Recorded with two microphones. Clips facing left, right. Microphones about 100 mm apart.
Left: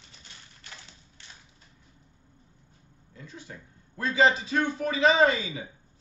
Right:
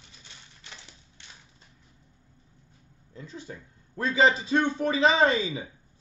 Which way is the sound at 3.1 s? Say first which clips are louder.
Right 4 dB; 30° right (ahead or behind).